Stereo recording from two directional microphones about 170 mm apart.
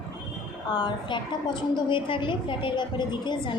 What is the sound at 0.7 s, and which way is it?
A woman's voice, 25° left (ahead or behind).